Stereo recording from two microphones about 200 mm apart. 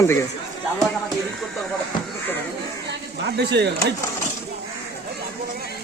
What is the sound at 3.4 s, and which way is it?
Speech, 60° right (ahead or behind).